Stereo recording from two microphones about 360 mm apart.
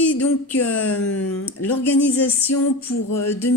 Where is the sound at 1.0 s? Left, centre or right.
Left.